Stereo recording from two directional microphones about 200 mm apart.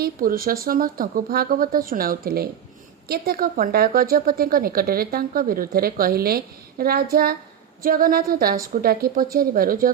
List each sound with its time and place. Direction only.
0.0 s a woman's voice: 45° right (ahead or behind)